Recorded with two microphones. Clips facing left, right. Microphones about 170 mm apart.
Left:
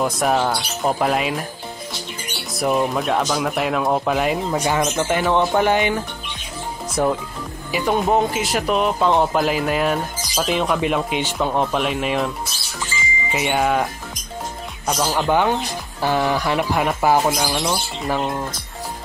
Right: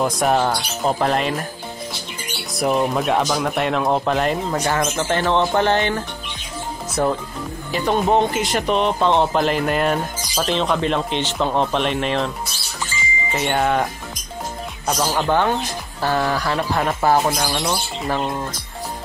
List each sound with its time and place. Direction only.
0.0 s speech: centre (ahead or behind)
2.6 s speech: centre (ahead or behind)
13.3 s speech: 5° left (ahead or behind)
14.9 s speech: centre (ahead or behind)